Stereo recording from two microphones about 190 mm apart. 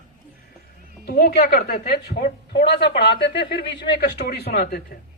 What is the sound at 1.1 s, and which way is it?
A woman's voice, 55° left (ahead or behind).